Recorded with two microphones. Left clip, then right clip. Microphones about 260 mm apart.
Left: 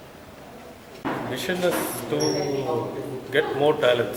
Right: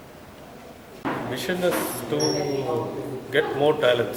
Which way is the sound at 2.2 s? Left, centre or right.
Left.